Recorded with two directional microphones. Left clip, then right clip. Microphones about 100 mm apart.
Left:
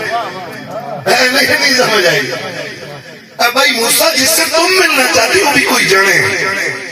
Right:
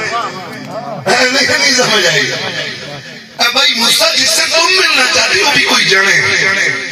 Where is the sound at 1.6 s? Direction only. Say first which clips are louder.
Even; 30° left (ahead or behind).